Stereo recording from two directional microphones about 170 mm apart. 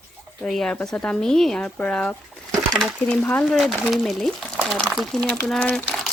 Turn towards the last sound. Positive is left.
turn(degrees=5)  # may be behind; listen again after turning